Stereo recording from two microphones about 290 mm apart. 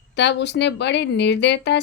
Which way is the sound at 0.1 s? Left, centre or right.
Left.